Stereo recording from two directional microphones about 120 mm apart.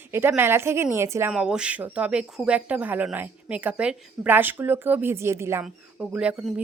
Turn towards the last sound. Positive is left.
turn(degrees=-10)  # may be behind; listen again after turning